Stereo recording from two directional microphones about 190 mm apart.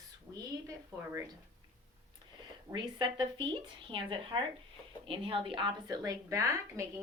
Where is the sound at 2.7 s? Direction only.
25° right (ahead or behind).